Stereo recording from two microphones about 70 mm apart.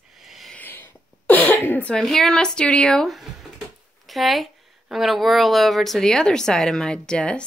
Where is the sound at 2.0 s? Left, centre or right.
Centre.